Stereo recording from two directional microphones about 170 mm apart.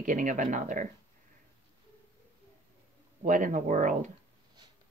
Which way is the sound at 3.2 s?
50° right (ahead or behind).